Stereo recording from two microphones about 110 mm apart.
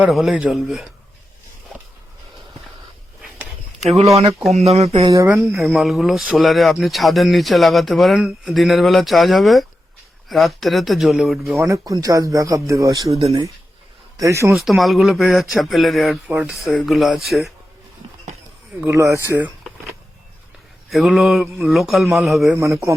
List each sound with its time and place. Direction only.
0.1 s speech: centre (ahead or behind)
3.2 s a sound: 5° right (ahead or behind)
3.8 s speech: centre (ahead or behind)
4.5 s speech: 75° right (ahead or behind)
5.1 s speech: 25° right (ahead or behind)
5.5 s speech: centre (ahead or behind)
11.5 s speech: 30° right (ahead or behind)
13.1 s speech: 60° right (ahead or behind)
14.2 s speech: 25° right (ahead or behind)
14.5 s speech: centre (ahead or behind)
18.9 s speech: 25° right (ahead or behind)
20.9 s speech: centre (ahead or behind)
22.5 s speech: 25° right (ahead or behind)